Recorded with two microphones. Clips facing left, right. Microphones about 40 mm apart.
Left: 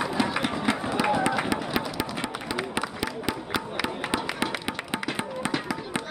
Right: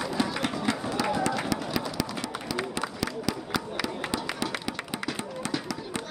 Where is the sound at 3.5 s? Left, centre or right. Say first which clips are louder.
Left 2 dB; left.